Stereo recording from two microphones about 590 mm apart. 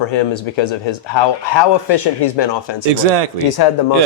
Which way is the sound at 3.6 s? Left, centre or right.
Left.